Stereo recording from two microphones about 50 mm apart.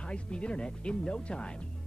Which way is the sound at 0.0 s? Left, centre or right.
Left.